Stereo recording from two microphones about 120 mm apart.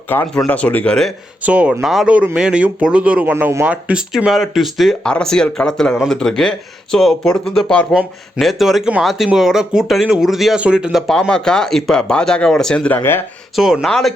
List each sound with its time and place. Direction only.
0.1 s speech: 15° left (ahead or behind)
1.4 s speech: 10° right (ahead or behind); by 13.0 s 10° left (ahead or behind)
13.0 s speech: 20° left (ahead or behind)
13.6 s speech: 5° right (ahead or behind)